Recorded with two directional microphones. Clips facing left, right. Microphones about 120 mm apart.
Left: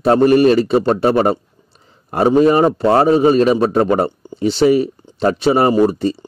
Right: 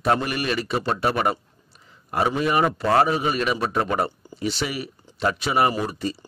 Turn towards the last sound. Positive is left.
turn(degrees=30)  # may be behind; listen again after turning